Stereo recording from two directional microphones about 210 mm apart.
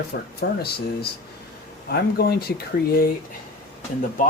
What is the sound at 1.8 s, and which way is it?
Speech, 50° left (ahead or behind).